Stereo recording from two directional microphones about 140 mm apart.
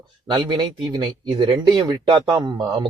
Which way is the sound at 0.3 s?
30° right (ahead or behind).